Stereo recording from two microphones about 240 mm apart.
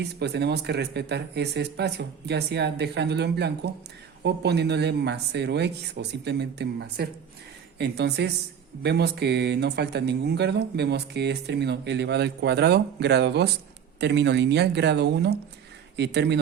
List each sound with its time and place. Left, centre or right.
0.0 s speech: right